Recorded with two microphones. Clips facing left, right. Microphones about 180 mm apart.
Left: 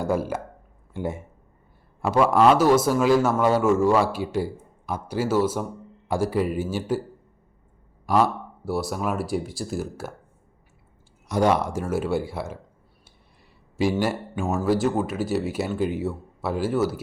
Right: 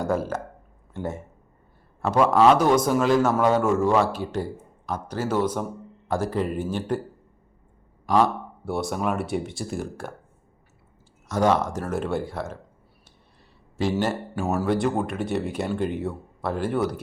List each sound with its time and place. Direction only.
0.0 s speech: 10° left (ahead or behind)
8.0 s speech: 10° left (ahead or behind)
11.3 s speech: 10° left (ahead or behind)
14.3 s speech: 5° right (ahead or behind)